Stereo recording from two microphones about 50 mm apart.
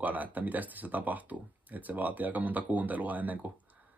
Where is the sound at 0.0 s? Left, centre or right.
Right.